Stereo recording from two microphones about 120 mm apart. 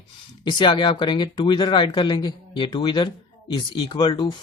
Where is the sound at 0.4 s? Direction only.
40° left (ahead or behind).